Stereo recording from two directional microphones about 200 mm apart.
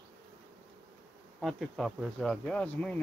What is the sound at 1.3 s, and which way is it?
Speech, centre (ahead or behind).